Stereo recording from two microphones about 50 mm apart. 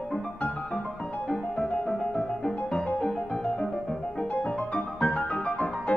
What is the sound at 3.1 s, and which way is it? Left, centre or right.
Music, centre.